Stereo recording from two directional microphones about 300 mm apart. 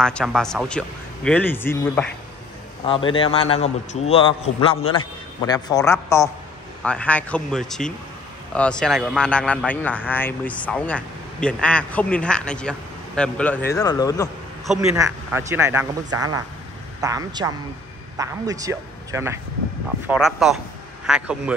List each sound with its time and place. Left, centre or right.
0.0 s a man's voice: centre
14.7 s a man's voice: centre